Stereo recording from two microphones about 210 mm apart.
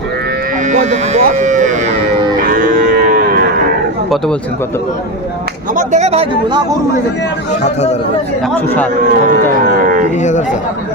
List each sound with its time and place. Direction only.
0.7 s speech: 35° right (ahead or behind)
2.5 s moo: 40° right (ahead or behind)
5.7 s speech: 35° right (ahead or behind)
8.5 s a man's voice: 10° left (ahead or behind)
9.3 s a sound: 40° right (ahead or behind)
10.2 s a man's voice: 35° left (ahead or behind)